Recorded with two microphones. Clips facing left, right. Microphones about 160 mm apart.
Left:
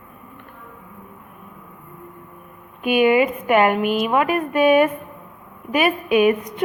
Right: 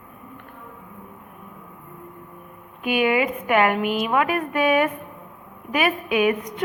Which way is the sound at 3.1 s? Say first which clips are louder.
Left 4 dB; 25° left (ahead or behind).